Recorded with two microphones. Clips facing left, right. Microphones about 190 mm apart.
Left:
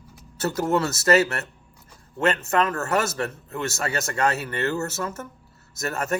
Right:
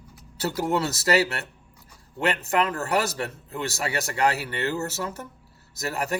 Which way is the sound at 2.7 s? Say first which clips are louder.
Left 1 dB; 35° right (ahead or behind).